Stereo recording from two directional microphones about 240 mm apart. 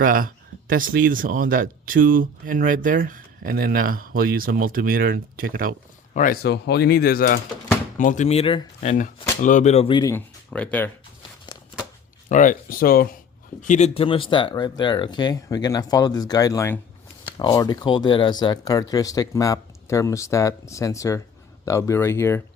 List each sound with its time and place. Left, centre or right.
0.0 s speech: right
6.1 s speech: left; by 10.9 s centre
12.3 s speech: left; by 22.4 s centre